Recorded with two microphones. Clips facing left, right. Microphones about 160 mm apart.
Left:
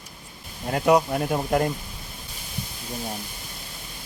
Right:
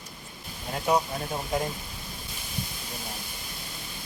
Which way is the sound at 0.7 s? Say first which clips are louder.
Left 6 dB; 65° left (ahead or behind).